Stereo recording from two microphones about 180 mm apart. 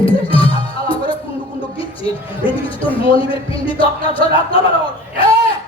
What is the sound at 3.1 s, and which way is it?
Speech, 30° left (ahead or behind).